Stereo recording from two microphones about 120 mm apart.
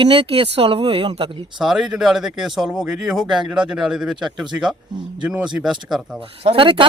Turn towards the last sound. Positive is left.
turn(degrees=-45)  # may be behind; listen again after turning